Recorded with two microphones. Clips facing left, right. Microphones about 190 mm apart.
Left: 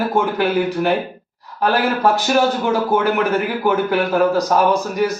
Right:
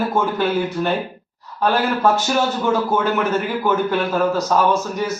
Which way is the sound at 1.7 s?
15° left (ahead or behind).